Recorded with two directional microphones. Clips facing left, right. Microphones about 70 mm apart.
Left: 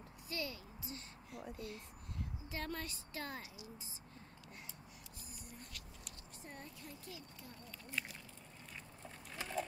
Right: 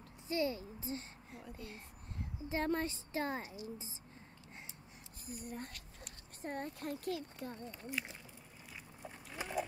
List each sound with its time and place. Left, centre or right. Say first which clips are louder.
0.3 s speech: right 9 dB; right
5.2 s speech: right 12 dB; right
9.0 s dog: right 3 dB; centre